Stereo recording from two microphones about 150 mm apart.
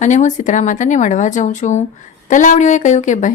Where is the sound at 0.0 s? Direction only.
55° left (ahead or behind).